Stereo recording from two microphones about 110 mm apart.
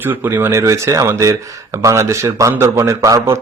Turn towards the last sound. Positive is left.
turn(degrees=-30)  # may be behind; listen again after turning